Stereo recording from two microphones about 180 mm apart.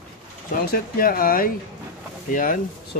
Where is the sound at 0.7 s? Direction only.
55° left (ahead or behind).